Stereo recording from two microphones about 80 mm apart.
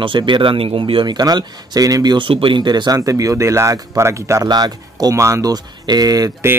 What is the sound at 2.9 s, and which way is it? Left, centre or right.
Speech, right.